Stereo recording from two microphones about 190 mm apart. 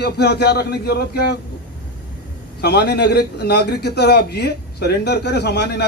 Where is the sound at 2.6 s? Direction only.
60° left (ahead or behind).